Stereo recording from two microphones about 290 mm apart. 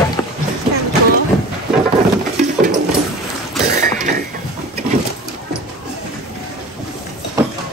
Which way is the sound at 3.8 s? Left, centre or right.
Right.